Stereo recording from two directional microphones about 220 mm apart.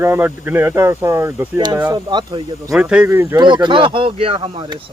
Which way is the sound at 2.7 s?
5° right (ahead or behind).